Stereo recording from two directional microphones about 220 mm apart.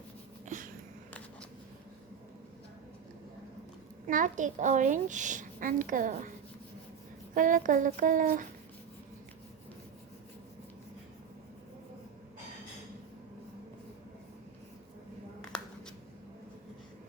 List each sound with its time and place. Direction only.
0.4 s a sound: 35° right (ahead or behind)
4.0 s a woman's voice: 35° right (ahead or behind)
7.3 s a woman's voice: 35° right (ahead or behind)